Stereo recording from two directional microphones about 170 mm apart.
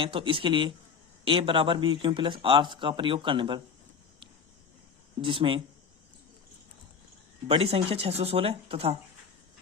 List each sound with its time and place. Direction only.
0.0 s speech: 30° right (ahead or behind)
5.2 s speech: 30° right (ahead or behind)
7.4 s speech: 35° right (ahead or behind)